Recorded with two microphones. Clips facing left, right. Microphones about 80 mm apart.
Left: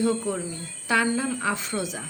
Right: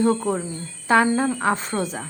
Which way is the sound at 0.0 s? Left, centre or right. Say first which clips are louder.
Right 4 dB; right.